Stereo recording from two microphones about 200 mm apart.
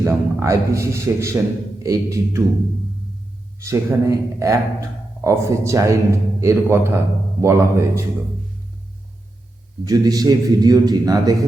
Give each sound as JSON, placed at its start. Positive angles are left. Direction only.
{"t": 0.0, "sound": "speech", "side_deg": -15}
{"t": 3.6, "sound": "speech", "side_deg": -15}
{"t": 9.8, "sound": "a man's voice", "side_deg": -20}